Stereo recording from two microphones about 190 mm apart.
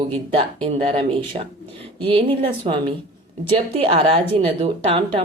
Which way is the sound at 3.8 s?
30° right (ahead or behind).